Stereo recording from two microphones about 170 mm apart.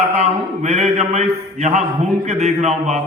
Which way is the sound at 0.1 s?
40° right (ahead or behind).